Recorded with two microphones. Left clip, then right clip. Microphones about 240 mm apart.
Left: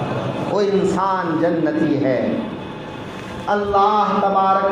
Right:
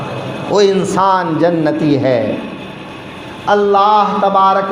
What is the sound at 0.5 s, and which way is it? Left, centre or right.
A man's voice, right.